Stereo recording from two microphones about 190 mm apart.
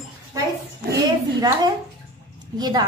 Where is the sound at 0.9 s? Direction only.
20° right (ahead or behind).